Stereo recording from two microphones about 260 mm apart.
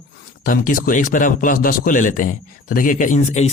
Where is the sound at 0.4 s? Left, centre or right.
Left.